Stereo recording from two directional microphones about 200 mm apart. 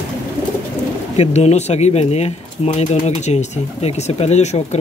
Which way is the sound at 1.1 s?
35° left (ahead or behind).